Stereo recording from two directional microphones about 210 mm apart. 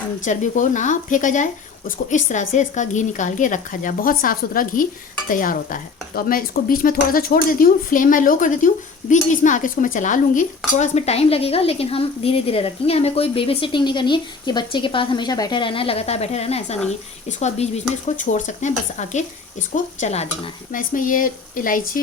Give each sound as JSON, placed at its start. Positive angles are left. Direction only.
{"t": 0.3, "sound": "a woman's voice", "side_deg": 35}